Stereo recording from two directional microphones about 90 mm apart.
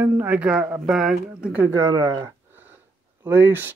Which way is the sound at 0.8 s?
5° right (ahead or behind).